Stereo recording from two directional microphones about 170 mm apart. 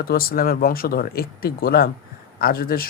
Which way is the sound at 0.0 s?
60° left (ahead or behind).